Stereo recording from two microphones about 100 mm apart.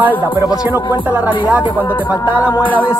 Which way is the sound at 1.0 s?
15° right (ahead or behind).